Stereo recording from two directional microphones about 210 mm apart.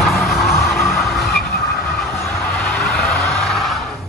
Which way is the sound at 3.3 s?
Centre (ahead or behind).